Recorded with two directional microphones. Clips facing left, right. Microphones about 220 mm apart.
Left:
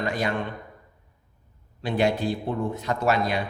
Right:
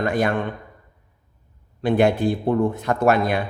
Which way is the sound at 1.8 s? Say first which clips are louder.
Right 6 dB; 55° right (ahead or behind).